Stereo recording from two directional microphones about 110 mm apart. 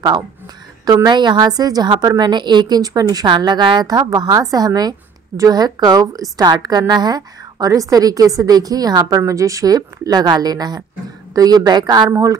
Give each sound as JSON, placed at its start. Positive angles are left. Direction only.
{"t": 0.8, "sound": "a woman's voice", "side_deg": -40}